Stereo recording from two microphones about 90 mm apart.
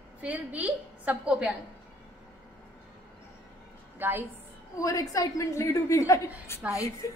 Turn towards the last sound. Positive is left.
turn(degrees=40)  # may be behind; listen again after turning